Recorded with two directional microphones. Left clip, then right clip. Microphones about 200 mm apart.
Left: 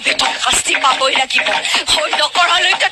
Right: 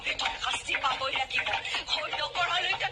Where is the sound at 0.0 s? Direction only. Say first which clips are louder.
Left 16 dB; 50° left (ahead or behind).